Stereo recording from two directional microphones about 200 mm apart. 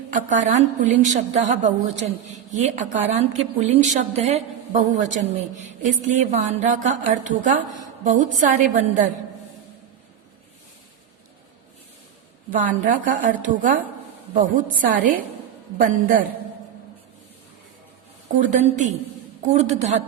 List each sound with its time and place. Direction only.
0.1 s a woman's voice: 40° right (ahead or behind)
12.5 s a woman's voice: 40° right (ahead or behind)
18.3 s a woman's voice: 40° right (ahead or behind)